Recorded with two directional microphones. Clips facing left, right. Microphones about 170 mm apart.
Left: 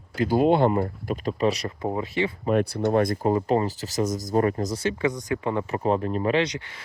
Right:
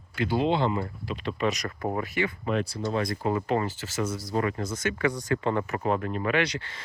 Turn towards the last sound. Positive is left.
turn(degrees=15)  # may be behind; listen again after turning